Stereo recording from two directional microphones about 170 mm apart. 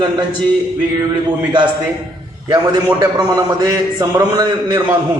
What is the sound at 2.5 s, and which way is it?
A man's voice, 20° right (ahead or behind).